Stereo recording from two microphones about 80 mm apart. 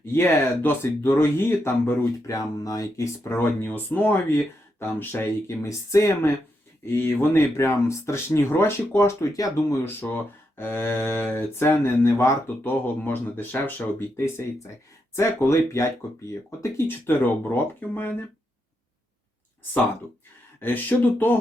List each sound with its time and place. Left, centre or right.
0.1 s speech: left
2.3 s speech: left
3.2 s speech: left
7.0 s speech: left
7.3 s speech: left
12.8 s speech: left
20.6 s speech: left